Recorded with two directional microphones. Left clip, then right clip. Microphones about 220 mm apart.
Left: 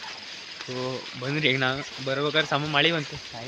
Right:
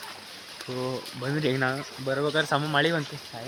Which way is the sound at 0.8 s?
5° right (ahead or behind).